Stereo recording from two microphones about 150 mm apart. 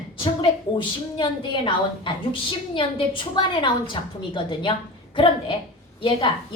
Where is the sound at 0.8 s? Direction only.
35° left (ahead or behind).